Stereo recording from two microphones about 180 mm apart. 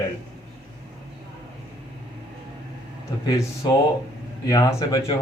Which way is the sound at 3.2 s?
20° left (ahead or behind).